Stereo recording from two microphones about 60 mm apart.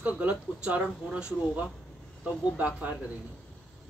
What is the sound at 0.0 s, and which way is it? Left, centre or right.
Speech, right.